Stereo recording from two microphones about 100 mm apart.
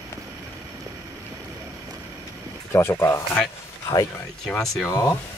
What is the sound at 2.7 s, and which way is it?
Speech, 25° left (ahead or behind).